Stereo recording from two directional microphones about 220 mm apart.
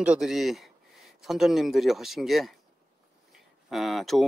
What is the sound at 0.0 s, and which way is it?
Speech, 5° right (ahead or behind).